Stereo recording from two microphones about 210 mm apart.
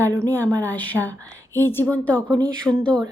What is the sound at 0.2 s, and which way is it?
Speech, 10° left (ahead or behind).